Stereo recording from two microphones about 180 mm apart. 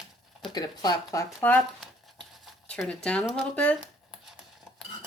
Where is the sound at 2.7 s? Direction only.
5° left (ahead or behind).